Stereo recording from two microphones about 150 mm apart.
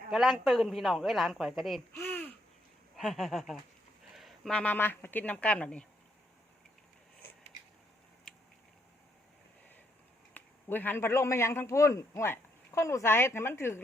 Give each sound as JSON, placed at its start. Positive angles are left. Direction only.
{"t": 0.1, "sound": "a woman's voice", "side_deg": 0}
{"t": 2.0, "sound": "babbling", "side_deg": 15}
{"t": 2.9, "sound": "a woman's voice", "side_deg": 0}
{"t": 10.3, "sound": "speech", "side_deg": 10}